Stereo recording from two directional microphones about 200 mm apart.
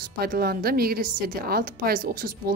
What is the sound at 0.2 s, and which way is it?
A woman's voice, 50° right (ahead or behind).